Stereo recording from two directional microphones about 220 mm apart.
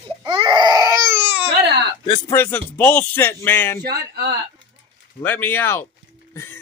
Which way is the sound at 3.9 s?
45° right (ahead or behind).